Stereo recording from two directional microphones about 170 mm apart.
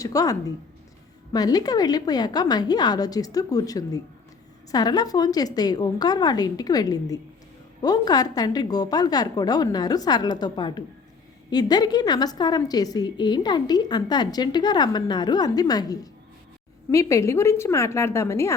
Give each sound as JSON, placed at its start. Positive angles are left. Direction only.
{"t": 0.0, "sound": "a woman's voice", "side_deg": 20}